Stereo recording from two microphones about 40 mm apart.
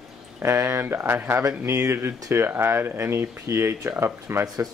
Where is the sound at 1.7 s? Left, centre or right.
Right.